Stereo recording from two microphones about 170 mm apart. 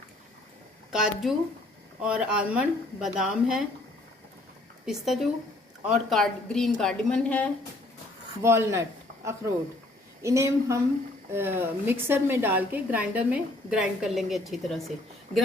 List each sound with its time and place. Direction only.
0.9 s a woman's voice: 5° right (ahead or behind)
4.9 s a woman's voice: centre (ahead or behind)
8.4 s a man's voice: 15° right (ahead or behind); by 14.9 s centre (ahead or behind)